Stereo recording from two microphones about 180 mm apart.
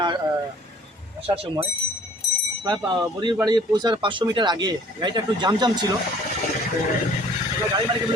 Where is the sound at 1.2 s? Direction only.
30° right (ahead or behind).